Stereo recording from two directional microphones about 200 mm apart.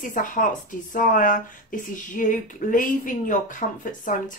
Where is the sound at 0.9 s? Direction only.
45° left (ahead or behind).